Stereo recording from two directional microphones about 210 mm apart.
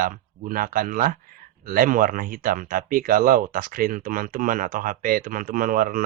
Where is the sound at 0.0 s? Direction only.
40° right (ahead or behind).